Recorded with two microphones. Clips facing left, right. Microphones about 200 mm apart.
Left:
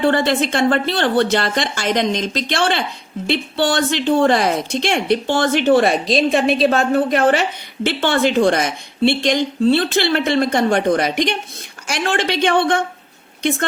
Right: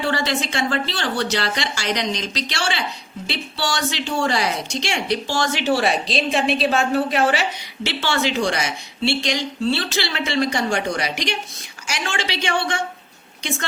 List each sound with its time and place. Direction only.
0.1 s a woman's voice: 55° left (ahead or behind)